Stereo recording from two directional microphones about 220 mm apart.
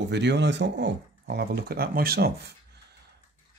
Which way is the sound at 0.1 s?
50° right (ahead or behind).